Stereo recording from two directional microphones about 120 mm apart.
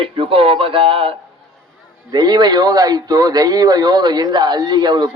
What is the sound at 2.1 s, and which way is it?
Speech, 35° right (ahead or behind).